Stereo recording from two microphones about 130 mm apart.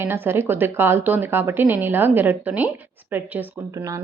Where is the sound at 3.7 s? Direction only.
25° right (ahead or behind).